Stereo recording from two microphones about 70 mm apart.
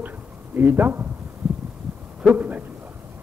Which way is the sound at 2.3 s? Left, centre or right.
Right.